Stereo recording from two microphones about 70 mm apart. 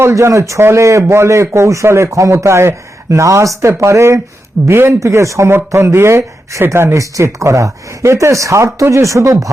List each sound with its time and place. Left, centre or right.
0.0 s speech: right